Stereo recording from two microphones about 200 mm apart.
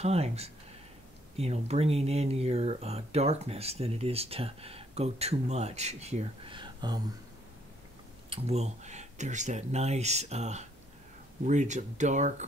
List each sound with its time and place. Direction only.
0.0 s speech: 30° right (ahead or behind)
8.3 s speech: 30° right (ahead or behind)